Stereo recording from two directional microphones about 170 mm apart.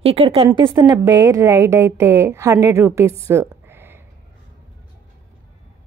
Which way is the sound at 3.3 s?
15° right (ahead or behind).